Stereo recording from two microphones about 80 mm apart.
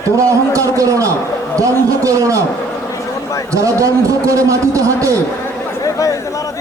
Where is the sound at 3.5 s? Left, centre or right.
Right.